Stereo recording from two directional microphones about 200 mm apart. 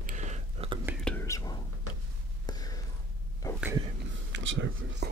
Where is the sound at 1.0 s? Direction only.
10° left (ahead or behind).